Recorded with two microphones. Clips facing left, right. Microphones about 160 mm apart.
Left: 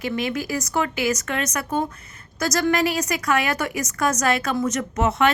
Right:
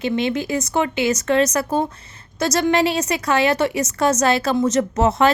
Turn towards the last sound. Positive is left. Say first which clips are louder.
# right 4 dB
turn(degrees=-30)  # may be behind; listen again after turning